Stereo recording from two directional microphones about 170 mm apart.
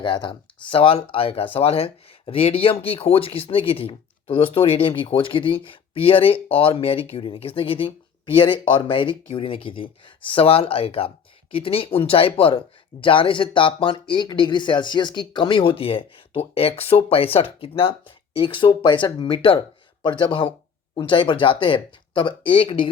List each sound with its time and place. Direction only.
0.0 s speech: 30° left (ahead or behind)